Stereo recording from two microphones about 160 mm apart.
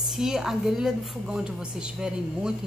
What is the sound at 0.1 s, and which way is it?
A woman's voice, 5° right (ahead or behind).